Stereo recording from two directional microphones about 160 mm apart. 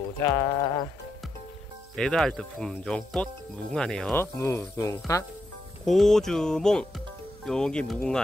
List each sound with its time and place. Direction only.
0.3 s speech: 25° left (ahead or behind)
2.0 s speech: 5° left (ahead or behind)
5.9 s speech: centre (ahead or behind)